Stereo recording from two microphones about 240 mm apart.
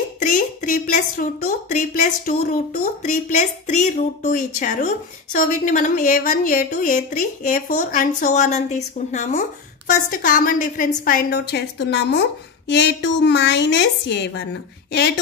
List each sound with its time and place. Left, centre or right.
0.2 s a woman's voice: left